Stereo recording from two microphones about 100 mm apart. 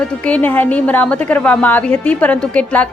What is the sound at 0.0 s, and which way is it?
A woman's voice, 10° left (ahead or behind).